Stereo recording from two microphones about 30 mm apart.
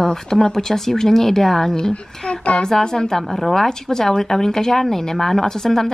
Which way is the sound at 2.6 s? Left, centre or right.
Left.